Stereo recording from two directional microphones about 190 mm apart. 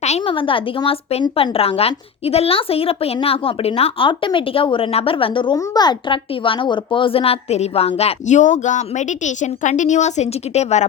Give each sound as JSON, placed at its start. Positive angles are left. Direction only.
{"t": 0.0, "sound": "speech", "side_deg": 30}